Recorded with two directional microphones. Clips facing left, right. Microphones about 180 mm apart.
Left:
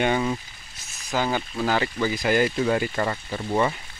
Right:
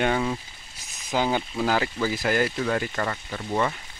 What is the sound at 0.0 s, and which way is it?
Speech, centre (ahead or behind).